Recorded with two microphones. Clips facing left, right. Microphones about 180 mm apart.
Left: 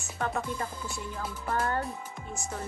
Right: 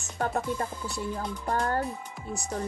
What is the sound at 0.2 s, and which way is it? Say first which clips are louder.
Music: right 3 dB; 35° right (ahead or behind).